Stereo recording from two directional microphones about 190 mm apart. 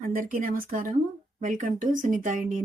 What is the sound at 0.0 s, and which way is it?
Speech, 50° right (ahead or behind).